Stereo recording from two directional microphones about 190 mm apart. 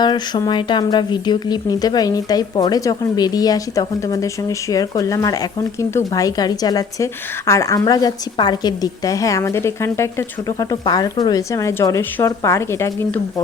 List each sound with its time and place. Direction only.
0.0 s a woman's voice: 20° left (ahead or behind)